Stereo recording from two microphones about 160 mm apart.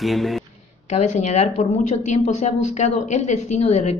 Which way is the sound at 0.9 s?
50° left (ahead or behind).